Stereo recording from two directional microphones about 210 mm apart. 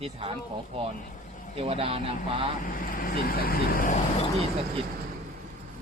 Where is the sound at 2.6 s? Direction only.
40° left (ahead or behind).